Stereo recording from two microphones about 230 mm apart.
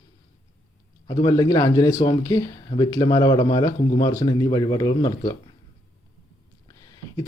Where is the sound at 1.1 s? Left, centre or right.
Centre.